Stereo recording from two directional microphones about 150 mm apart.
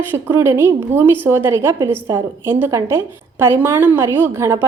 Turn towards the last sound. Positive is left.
turn(degrees=-20)  # may be behind; listen again after turning